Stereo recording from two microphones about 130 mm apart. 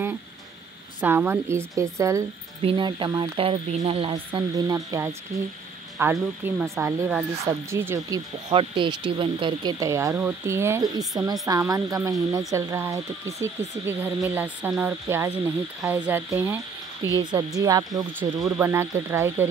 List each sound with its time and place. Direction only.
1.0 s speech: 15° right (ahead or behind)
2.6 s speech: 40° right (ahead or behind)
4.1 s speech: 35° right (ahead or behind)
8.5 s speech: 40° right (ahead or behind); by 16.3 s 15° right (ahead or behind)
17.2 s speech: 30° right (ahead or behind)